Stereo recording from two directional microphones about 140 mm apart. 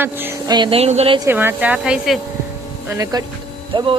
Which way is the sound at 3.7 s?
35° right (ahead or behind).